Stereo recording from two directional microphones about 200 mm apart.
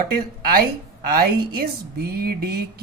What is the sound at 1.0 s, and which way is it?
A woman's voice, 50° right (ahead or behind).